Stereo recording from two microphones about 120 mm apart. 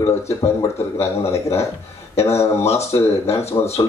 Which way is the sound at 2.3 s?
60° left (ahead or behind).